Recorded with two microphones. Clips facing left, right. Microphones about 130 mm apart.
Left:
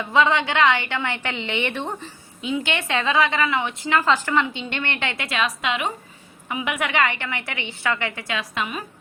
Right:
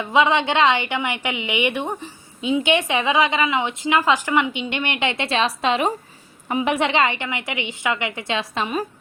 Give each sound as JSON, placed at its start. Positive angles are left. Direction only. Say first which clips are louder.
{"t": 0.0, "sound": "a woman's voice", "louder": "right 2 dB", "side_deg": -15}